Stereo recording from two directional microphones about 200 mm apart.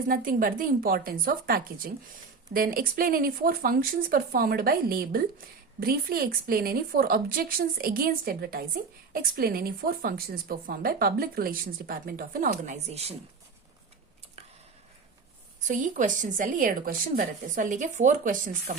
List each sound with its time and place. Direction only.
0.1 s a woman's voice: 45° right (ahead or behind)
15.6 s a woman's voice: 40° right (ahead or behind)